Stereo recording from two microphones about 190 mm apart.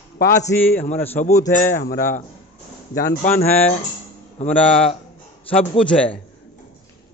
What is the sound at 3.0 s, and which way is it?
Speech, 50° left (ahead or behind).